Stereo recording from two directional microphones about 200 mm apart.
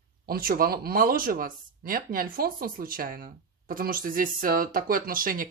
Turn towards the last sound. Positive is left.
turn(degrees=-45)  # may be behind; listen again after turning